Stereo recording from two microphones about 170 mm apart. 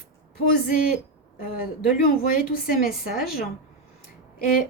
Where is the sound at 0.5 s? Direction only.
60° left (ahead or behind).